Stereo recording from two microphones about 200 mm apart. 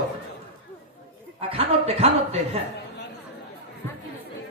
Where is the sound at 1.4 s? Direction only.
30° right (ahead or behind).